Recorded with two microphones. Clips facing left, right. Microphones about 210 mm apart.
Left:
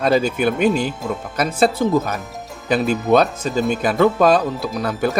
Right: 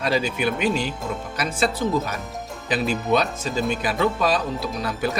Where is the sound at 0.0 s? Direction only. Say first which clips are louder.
Left 6 dB; 45° left (ahead or behind).